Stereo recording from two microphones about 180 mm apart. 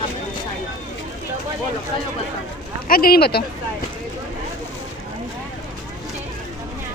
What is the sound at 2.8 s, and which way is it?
Speech, 55° left (ahead or behind).